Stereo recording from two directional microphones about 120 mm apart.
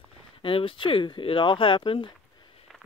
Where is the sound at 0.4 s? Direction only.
50° left (ahead or behind).